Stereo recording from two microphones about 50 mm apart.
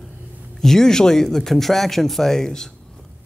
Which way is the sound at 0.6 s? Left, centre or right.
Centre.